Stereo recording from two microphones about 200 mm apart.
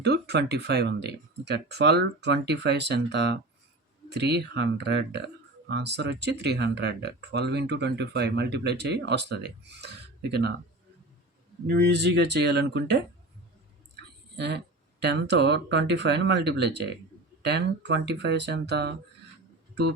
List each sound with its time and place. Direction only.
0.0 s speech: 55° right (ahead or behind)
11.6 s speech: 60° right (ahead or behind)
13.9 s a sound: 60° right (ahead or behind)
15.0 s speech: 55° right (ahead or behind)